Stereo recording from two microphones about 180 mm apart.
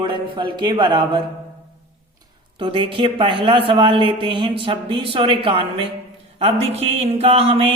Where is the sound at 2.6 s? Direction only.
30° right (ahead or behind).